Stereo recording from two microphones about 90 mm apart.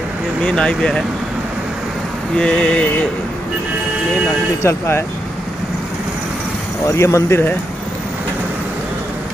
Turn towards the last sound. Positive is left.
turn(degrees=30)  # may be behind; listen again after turning